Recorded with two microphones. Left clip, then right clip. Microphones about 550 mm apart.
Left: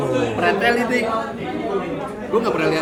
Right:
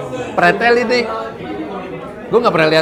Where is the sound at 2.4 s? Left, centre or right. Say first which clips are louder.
Right 9 dB; right.